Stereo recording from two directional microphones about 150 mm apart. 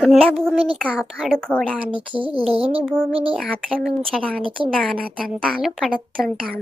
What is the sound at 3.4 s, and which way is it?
A woman's voice, 5° left (ahead or behind).